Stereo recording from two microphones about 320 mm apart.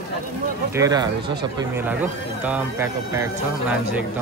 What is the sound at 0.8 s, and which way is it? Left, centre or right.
Speech, centre.